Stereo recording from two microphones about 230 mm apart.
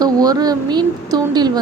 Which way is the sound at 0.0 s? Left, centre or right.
Centre.